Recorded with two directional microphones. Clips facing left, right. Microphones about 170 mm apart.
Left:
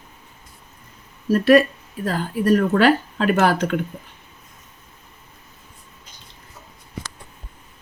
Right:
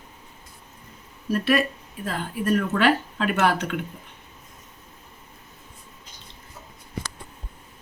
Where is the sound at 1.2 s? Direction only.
40° left (ahead or behind).